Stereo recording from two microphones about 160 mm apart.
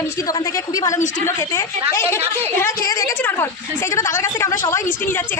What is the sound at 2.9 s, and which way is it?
A woman's voice, 20° left (ahead or behind).